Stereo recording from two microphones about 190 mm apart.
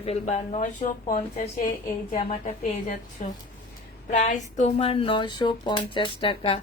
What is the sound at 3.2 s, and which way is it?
Speech, 40° left (ahead or behind).